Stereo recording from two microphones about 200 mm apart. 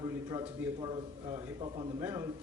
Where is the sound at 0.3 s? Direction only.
20° right (ahead or behind).